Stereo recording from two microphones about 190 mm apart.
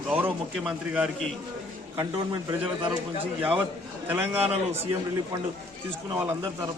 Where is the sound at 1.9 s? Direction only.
20° right (ahead or behind).